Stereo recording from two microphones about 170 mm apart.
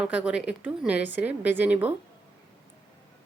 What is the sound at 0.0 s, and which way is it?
Speech, 5° right (ahead or behind).